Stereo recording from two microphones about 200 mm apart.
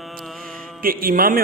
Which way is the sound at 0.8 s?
45° right (ahead or behind).